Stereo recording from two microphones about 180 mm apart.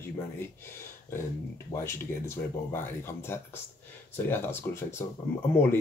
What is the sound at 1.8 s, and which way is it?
Speech, 15° left (ahead or behind).